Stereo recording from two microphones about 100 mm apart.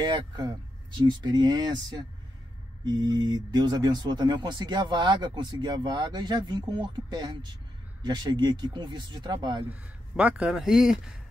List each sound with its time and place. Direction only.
0.0 s speech: 45° right (ahead or behind)
9.7 s speech: 15° right (ahead or behind)